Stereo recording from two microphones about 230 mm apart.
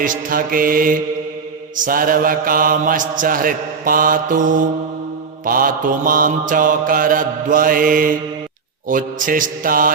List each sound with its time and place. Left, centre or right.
0.0 s mantra: right